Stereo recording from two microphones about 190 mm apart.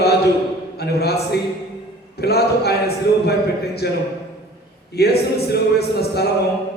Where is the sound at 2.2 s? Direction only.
60° left (ahead or behind).